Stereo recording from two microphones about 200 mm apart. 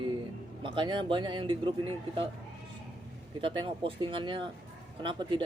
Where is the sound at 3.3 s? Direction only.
25° right (ahead or behind).